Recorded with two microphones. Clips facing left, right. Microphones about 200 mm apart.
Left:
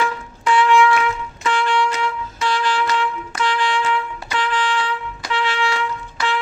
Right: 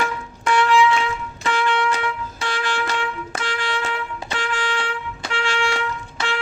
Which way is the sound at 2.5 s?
50° right (ahead or behind).